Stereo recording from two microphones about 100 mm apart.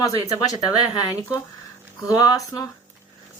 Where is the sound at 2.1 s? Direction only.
35° left (ahead or behind).